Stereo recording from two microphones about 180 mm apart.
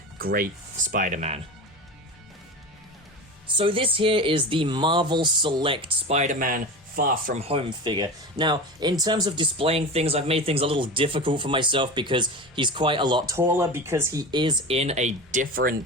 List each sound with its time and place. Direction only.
0.2 s speech: 55° right (ahead or behind)
3.6 s speech: 30° right (ahead or behind); by 7.3 s 50° right (ahead or behind)
7.3 s speech: 30° right (ahead or behind); by 15.7 s 50° right (ahead or behind)